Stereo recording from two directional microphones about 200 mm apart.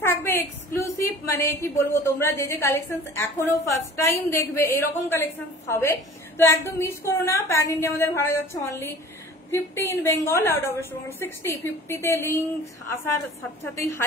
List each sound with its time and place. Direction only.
0.0 s a woman's voice: 10° left (ahead or behind)
13.7 s a woman's voice: 15° left (ahead or behind)